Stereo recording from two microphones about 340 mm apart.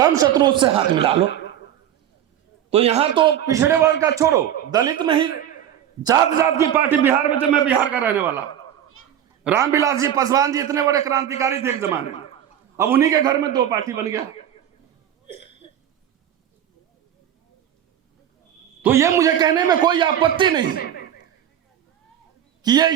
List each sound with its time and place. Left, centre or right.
0.0 s a man's voice: centre
2.6 s a man's voice: centre
15.3 s hiccup: centre
18.8 s a man's voice: centre
20.7 s speech: left
22.6 s a man's voice: centre